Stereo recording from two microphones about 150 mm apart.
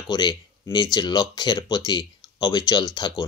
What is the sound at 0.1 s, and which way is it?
Speech, 30° left (ahead or behind).